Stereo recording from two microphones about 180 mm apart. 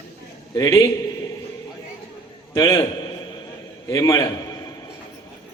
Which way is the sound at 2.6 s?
20° left (ahead or behind).